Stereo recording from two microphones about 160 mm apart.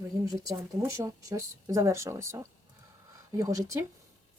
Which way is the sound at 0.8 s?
20° right (ahead or behind).